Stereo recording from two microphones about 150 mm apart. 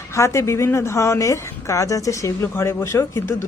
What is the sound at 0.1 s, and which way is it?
A woman's voice, 20° left (ahead or behind).